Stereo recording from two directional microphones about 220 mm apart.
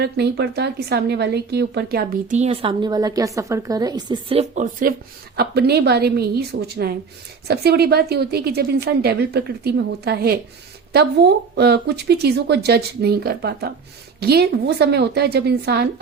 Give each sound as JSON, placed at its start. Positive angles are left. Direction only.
{"t": 0.0, "sound": "a woman's voice", "side_deg": -50}
{"t": 2.4, "sound": "a woman's voice", "side_deg": -25}